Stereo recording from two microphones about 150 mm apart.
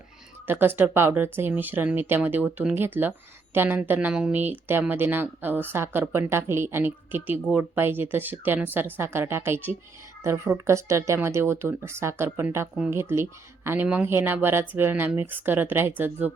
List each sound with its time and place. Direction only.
0.4 s speech: 15° right (ahead or behind)